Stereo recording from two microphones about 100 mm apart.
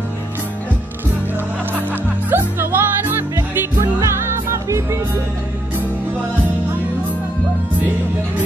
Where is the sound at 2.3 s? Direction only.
20° right (ahead or behind).